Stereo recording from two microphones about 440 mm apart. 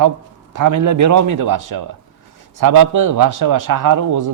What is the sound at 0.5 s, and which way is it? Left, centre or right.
A man's voice, right.